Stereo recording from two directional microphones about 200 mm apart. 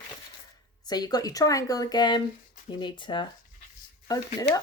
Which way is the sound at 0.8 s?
20° left (ahead or behind).